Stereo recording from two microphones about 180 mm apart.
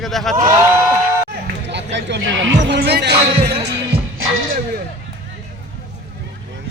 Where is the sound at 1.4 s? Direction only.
75° right (ahead or behind).